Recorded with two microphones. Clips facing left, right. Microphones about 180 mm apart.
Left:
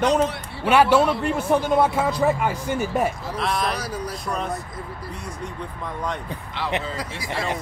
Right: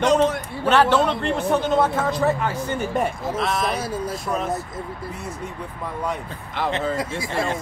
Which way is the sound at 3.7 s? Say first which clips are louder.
Right 3 dB; 25° right (ahead or behind).